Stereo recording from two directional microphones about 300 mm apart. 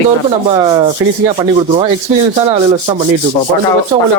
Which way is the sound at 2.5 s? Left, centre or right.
Centre.